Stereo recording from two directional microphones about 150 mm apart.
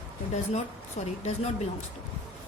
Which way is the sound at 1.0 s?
55° left (ahead or behind).